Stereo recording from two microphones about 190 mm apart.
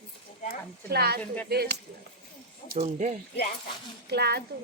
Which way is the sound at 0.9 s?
55° right (ahead or behind).